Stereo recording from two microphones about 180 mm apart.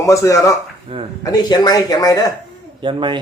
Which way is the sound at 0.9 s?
35° right (ahead or behind).